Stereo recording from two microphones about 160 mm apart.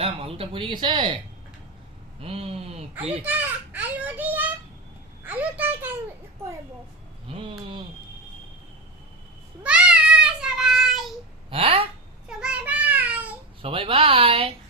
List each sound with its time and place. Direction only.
0.0 s speech: 35° right (ahead or behind)
2.2 s speech: 35° right (ahead or behind)
3.2 s children playing: 10° right (ahead or behind)
5.2 s a sound: 10° right (ahead or behind)
9.6 s child singing: 5° right (ahead or behind)
11.5 s speech: 35° right (ahead or behind)
12.4 s child singing: 10° right (ahead or behind)
13.6 s speech: 35° right (ahead or behind)